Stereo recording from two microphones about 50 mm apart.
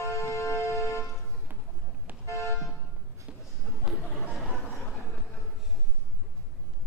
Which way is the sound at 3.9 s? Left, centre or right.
Centre.